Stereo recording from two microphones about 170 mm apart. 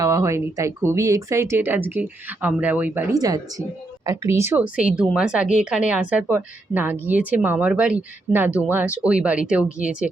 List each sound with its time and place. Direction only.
0.0 s speech: 20° right (ahead or behind)
3.2 s speech: 20° right (ahead or behind)